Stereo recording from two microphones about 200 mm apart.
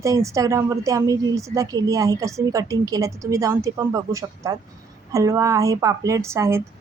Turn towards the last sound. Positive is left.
turn(degrees=-15)  # may be behind; listen again after turning